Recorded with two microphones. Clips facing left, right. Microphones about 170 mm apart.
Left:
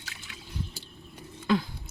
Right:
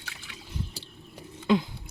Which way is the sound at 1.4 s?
20° right (ahead or behind).